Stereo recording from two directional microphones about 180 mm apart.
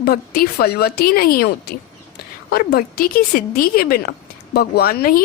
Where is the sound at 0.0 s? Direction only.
60° left (ahead or behind).